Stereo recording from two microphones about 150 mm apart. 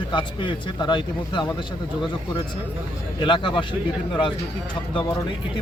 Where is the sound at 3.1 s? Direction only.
35° left (ahead or behind).